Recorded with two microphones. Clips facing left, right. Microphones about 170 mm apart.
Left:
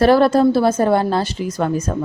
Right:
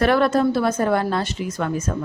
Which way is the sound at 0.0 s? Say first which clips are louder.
Left 5 dB; 30° left (ahead or behind).